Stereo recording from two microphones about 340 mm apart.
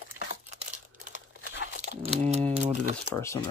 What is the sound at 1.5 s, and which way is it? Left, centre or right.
Crumpling, left.